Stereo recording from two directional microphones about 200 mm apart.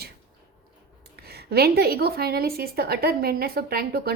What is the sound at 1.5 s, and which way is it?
A woman's voice, 50° right (ahead or behind).